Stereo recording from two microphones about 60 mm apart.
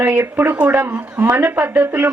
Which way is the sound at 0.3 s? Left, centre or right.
Right.